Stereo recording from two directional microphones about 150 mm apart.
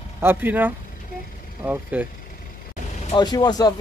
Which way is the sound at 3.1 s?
30° left (ahead or behind).